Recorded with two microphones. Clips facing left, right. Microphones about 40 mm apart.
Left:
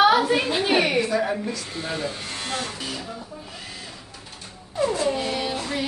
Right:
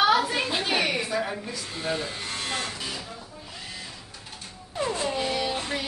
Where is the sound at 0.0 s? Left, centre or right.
Centre.